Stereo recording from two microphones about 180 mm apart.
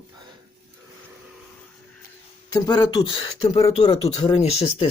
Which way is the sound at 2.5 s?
20° left (ahead or behind).